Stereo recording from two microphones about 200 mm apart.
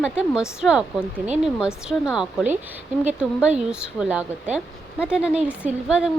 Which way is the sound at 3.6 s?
5° right (ahead or behind).